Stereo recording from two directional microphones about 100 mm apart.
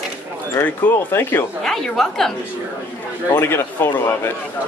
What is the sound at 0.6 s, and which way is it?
Speech, 20° left (ahead or behind).